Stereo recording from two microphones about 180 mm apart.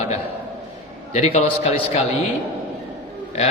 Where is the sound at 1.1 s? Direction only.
40° left (ahead or behind).